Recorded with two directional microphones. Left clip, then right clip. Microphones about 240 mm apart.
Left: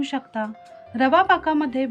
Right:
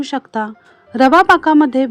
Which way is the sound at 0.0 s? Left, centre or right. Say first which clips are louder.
Right 6 dB; right.